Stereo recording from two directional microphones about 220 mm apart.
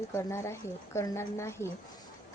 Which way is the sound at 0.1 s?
10° left (ahead or behind).